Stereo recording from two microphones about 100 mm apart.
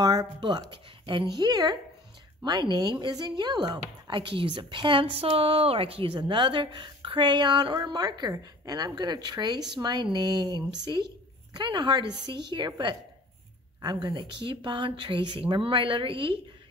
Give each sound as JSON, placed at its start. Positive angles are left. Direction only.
{"t": 0.0, "sound": "a woman's voice", "side_deg": -40}